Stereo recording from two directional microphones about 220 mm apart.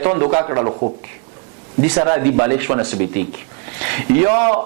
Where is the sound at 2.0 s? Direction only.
25° right (ahead or behind).